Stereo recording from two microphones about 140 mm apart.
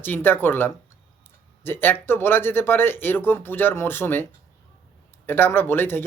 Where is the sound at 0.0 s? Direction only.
15° left (ahead or behind).